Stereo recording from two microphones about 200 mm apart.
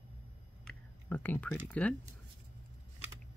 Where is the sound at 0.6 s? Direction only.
10° left (ahead or behind).